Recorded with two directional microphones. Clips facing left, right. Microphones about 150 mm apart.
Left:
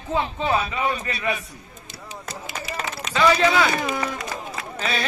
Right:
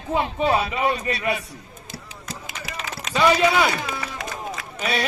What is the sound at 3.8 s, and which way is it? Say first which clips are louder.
Run: left 5 dB; 50° left (ahead or behind).